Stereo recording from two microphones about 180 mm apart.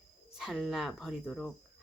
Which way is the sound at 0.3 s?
Centre (ahead or behind).